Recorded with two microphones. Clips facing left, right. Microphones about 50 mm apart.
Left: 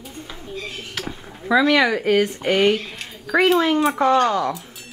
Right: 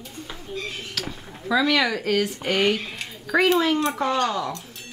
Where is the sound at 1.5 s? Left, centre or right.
Centre.